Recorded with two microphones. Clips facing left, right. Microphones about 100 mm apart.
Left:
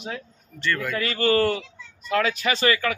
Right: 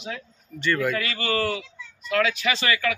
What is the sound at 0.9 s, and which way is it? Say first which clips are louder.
Speech: left 5 dB; 40° left (ahead or behind).